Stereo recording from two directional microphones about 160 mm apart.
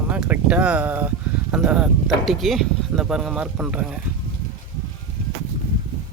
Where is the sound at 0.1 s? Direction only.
10° right (ahead or behind).